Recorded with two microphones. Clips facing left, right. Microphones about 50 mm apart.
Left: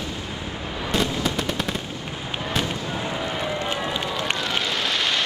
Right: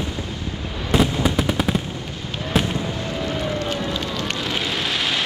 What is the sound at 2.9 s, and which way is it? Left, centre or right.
Run, centre.